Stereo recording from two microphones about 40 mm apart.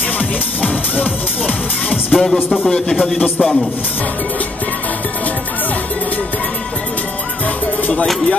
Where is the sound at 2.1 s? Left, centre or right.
Centre.